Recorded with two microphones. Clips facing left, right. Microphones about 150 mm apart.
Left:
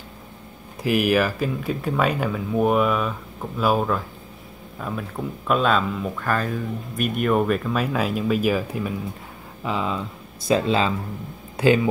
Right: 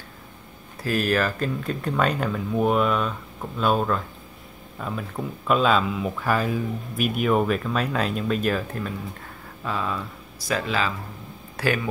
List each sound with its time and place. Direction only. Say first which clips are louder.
0.8 s speech: left 3 dB; 15° left (ahead or behind)